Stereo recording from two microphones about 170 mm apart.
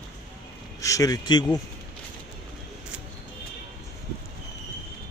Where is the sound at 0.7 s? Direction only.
20° left (ahead or behind).